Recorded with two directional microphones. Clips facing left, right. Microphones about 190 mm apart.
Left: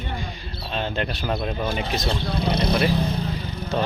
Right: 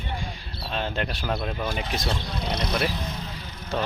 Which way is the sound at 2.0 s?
30° left (ahead or behind).